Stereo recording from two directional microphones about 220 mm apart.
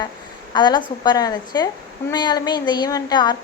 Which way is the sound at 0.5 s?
20° left (ahead or behind).